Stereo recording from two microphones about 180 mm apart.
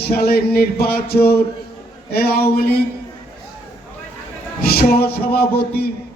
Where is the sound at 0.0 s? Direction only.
60° left (ahead or behind).